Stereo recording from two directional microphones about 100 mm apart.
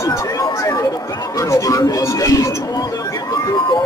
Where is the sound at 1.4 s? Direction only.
35° left (ahead or behind).